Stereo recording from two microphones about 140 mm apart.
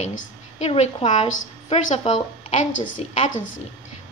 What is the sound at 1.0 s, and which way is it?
A woman's voice, 40° left (ahead or behind).